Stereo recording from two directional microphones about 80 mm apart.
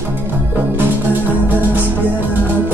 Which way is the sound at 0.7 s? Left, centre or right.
Right.